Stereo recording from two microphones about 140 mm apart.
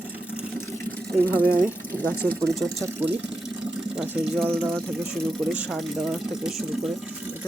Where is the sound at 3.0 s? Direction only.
15° right (ahead or behind).